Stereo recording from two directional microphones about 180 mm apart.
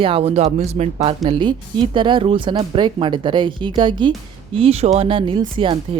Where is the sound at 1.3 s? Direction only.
25° right (ahead or behind).